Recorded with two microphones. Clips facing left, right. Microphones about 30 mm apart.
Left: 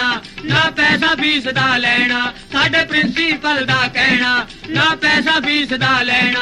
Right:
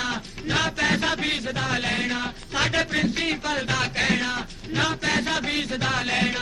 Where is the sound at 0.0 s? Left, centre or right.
Left.